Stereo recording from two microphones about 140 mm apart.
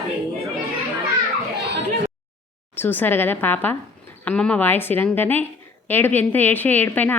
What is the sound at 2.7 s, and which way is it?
Speech, 15° left (ahead or behind).